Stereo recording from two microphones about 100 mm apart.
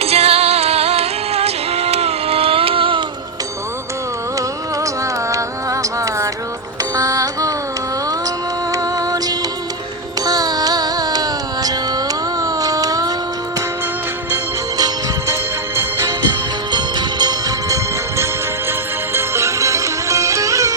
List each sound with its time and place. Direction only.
0.0 s music: 90° right; by 3.0 s 65° right (ahead or behind)
5.3 s music: 35° right (ahead or behind)
8.7 s music: 35° right (ahead or behind)
10.2 s carnatic music: 40° right (ahead or behind)
14.8 s music: 40° right (ahead or behind)
15.7 s music: 25° right (ahead or behind)
16.7 s music: 45° right (ahead or behind)
19.1 s music: 25° right (ahead or behind)